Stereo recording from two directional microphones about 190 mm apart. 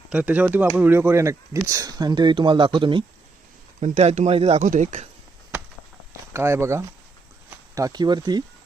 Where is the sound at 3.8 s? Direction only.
35° right (ahead or behind).